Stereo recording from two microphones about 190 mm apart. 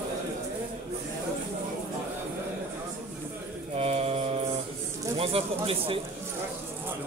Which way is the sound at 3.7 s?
30° right (ahead or behind).